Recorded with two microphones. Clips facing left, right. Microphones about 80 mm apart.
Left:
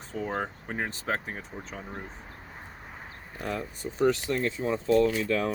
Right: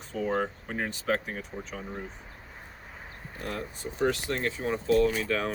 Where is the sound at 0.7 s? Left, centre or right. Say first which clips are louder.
Even; left.